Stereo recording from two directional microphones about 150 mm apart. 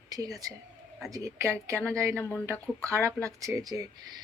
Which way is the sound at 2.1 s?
10° left (ahead or behind).